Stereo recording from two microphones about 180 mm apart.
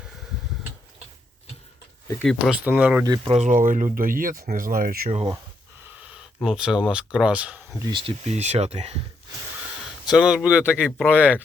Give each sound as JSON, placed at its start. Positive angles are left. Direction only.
{"t": 2.2, "sound": "speech", "side_deg": -5}
{"t": 3.1, "sound": "speech", "side_deg": -35}
{"t": 6.1, "sound": "speech", "side_deg": -5}
{"t": 7.9, "sound": "speech", "side_deg": -30}
{"t": 10.1, "sound": "speech", "side_deg": -5}